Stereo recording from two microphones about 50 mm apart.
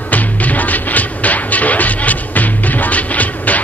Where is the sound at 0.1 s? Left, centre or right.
Left.